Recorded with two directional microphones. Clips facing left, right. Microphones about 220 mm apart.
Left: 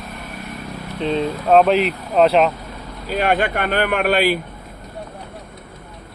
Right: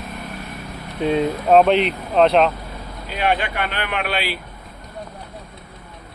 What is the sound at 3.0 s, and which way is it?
Speech, 45° left (ahead or behind).